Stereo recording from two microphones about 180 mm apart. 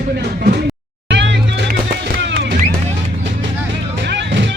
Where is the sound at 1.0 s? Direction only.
80° right.